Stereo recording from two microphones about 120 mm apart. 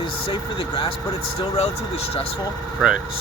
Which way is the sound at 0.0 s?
45° left (ahead or behind).